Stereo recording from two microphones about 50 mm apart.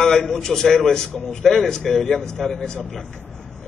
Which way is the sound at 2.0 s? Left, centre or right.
Left.